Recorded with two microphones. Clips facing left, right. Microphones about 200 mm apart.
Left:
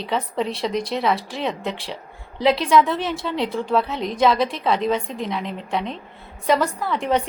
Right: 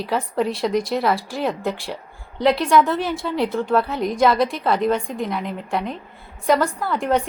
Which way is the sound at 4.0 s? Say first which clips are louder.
Right 3 dB; 25° left (ahead or behind).